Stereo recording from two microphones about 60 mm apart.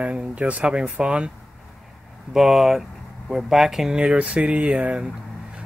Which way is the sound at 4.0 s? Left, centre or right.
Centre.